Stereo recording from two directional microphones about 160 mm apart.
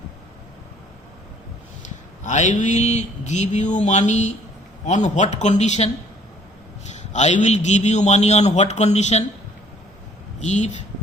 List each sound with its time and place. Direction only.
2.2 s a man's voice: 50° left (ahead or behind)
10.4 s a man's voice: 45° left (ahead or behind)